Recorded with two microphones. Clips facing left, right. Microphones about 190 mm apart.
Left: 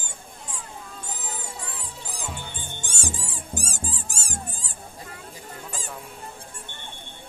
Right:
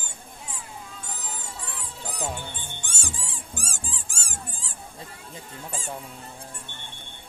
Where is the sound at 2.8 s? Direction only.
40° left (ahead or behind).